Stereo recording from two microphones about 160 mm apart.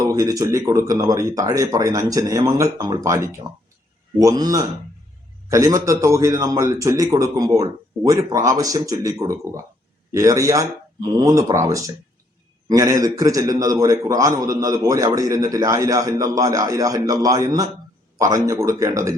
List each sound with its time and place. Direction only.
0.0 s a man's voice: 20° right (ahead or behind)